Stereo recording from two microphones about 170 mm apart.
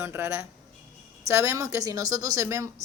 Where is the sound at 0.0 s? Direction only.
15° right (ahead or behind).